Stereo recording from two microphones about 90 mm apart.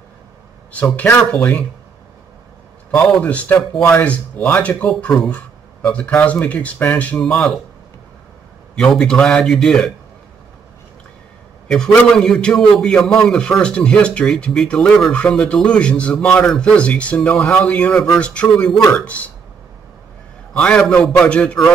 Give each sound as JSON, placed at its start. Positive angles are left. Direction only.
{"t": 0.7, "sound": "a man's voice", "side_deg": 15}
{"t": 3.1, "sound": "a man's voice", "side_deg": 15}
{"t": 8.7, "sound": "a man's voice", "side_deg": 5}
{"t": 11.6, "sound": "a sound", "side_deg": 5}
{"t": 12.1, "sound": "a man's voice", "side_deg": 5}
{"t": 20.5, "sound": "a man's voice", "side_deg": 10}